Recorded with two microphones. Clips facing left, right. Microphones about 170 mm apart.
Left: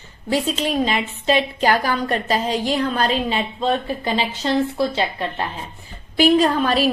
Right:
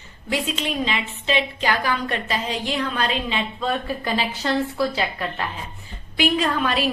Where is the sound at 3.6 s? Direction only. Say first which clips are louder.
Left 4 dB; 25° left (ahead or behind).